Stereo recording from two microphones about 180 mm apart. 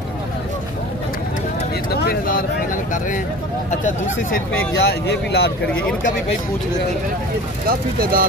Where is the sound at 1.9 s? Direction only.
60° left (ahead or behind).